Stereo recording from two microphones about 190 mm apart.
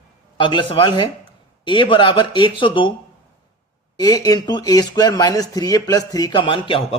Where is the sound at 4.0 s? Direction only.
20° left (ahead or behind).